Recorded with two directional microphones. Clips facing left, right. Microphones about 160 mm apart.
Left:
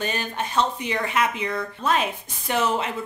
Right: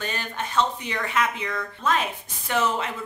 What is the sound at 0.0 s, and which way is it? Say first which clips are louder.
Speech: left 3 dB; 20° left (ahead or behind).